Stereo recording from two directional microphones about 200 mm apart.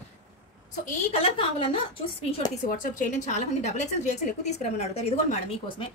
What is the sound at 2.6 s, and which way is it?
A woman's voice, 45° left (ahead or behind).